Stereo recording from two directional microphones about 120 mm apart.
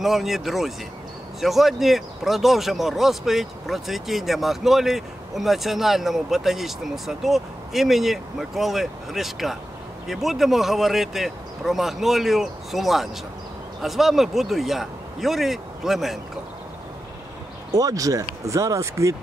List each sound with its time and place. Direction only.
0.0 s speech: centre (ahead or behind)
17.7 s speech: 30° right (ahead or behind)